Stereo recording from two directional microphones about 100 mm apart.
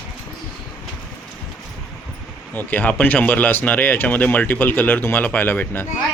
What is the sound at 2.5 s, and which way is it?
Speech, 15° left (ahead or behind).